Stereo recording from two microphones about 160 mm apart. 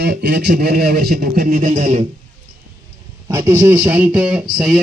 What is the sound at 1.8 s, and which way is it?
Speech, 45° right (ahead or behind).